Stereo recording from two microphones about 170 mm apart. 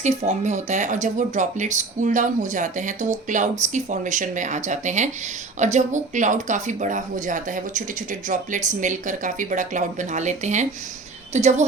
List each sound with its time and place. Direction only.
0.0 s speech: 40° right (ahead or behind)